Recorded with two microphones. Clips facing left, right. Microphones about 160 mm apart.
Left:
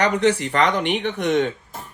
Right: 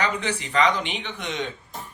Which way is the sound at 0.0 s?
65° left (ahead or behind).